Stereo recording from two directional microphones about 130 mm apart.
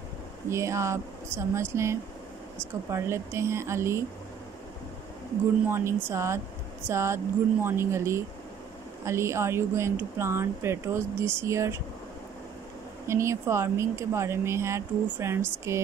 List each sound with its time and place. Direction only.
0.5 s speech: 20° right (ahead or behind)
5.7 s speech: 20° right (ahead or behind)
13.0 s speech: 20° right (ahead or behind)